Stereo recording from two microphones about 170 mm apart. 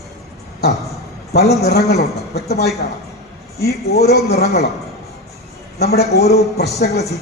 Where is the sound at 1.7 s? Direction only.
70° left (ahead or behind).